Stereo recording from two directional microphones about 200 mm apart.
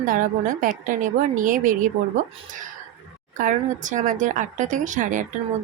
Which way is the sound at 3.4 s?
40° right (ahead or behind).